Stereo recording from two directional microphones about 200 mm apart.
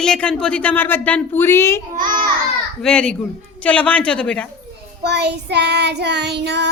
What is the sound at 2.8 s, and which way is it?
Speech, 5° left (ahead or behind).